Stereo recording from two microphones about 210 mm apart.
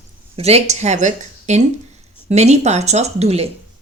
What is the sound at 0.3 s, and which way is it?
A woman's voice, 30° right (ahead or behind).